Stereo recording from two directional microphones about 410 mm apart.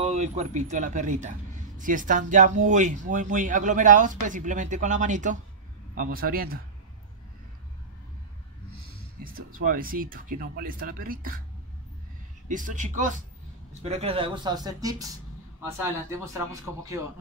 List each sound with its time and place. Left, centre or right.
0.0 s speech: centre
9.2 s speech: centre
12.4 s speech: centre